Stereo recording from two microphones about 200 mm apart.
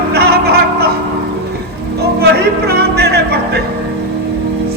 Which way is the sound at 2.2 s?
55° right (ahead or behind).